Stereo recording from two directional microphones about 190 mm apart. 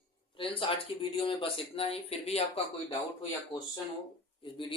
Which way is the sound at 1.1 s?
30° left (ahead or behind).